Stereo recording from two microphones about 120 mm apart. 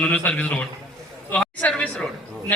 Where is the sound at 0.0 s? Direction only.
10° left (ahead or behind).